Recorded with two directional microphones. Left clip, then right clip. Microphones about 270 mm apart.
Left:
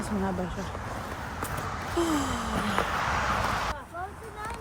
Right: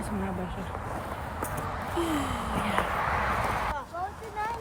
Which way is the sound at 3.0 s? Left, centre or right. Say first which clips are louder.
Even; right.